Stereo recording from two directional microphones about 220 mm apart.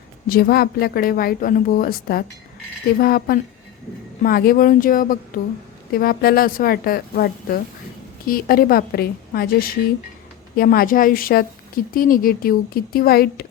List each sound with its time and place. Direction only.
0.3 s a woman's voice: 45° left (ahead or behind)